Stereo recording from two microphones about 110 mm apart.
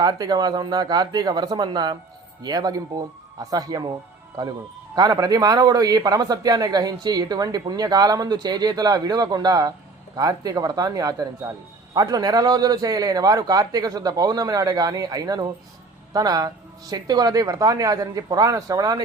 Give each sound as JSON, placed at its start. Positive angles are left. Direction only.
{"t": 0.0, "sound": "speech", "side_deg": -35}
{"t": 4.9, "sound": "speech", "side_deg": -35}